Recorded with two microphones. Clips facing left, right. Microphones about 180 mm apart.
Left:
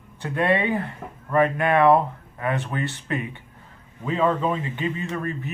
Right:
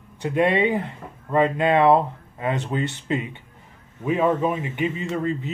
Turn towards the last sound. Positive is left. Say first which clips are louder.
# right 3 dB
turn(degrees=-20)  # may be behind; listen again after turning